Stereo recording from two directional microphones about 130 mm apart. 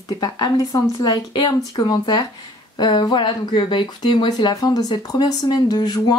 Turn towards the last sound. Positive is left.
turn(degrees=30)  # may be behind; listen again after turning